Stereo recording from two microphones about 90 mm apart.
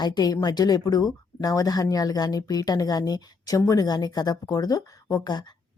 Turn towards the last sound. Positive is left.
turn(degrees=50)  # may be behind; listen again after turning